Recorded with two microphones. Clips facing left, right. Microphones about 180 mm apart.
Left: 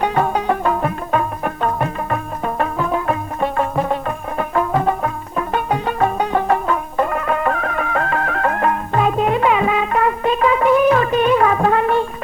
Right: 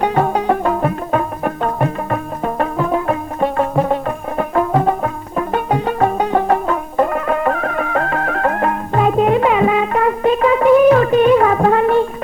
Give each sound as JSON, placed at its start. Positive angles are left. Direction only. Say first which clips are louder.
{"t": 0.0, "sound": "music", "louder": "right 2 dB", "side_deg": -30}